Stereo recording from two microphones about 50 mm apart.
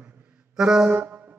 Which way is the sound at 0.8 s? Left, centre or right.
Right.